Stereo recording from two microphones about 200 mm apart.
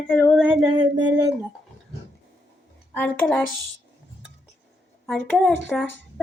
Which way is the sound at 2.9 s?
10° left (ahead or behind).